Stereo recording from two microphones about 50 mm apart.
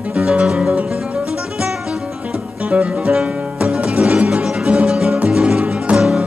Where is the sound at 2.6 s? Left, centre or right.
Right.